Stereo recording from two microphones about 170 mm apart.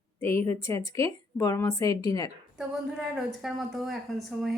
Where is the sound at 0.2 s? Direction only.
15° left (ahead or behind).